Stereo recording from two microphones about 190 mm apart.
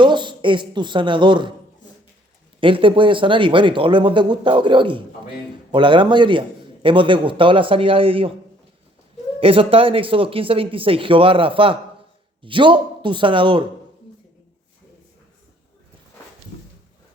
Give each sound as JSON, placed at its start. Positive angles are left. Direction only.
{"t": 0.0, "sound": "speech", "side_deg": -25}
{"t": 2.6, "sound": "speech", "side_deg": -25}
{"t": 9.4, "sound": "speech", "side_deg": -30}